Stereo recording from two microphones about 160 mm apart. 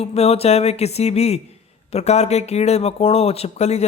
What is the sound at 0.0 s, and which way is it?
Speech, 40° left (ahead or behind).